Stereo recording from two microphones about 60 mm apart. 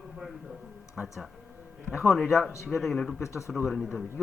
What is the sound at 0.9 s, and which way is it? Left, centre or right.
A man's voice, centre.